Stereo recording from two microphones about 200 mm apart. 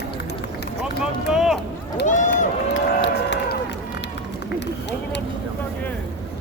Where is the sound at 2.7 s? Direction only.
65° left (ahead or behind).